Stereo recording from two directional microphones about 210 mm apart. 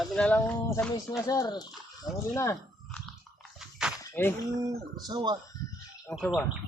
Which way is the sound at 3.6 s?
5° right (ahead or behind).